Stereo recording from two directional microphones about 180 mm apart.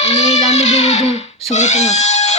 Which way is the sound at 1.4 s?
40° left (ahead or behind).